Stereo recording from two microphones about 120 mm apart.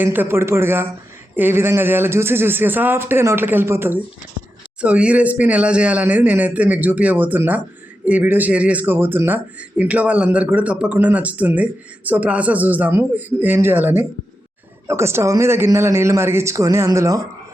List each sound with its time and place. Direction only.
0.0 s speech: 15° right (ahead or behind)